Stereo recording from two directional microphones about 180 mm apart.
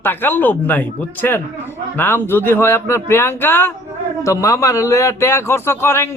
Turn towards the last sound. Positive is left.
turn(degrees=15)  # may be behind; listen again after turning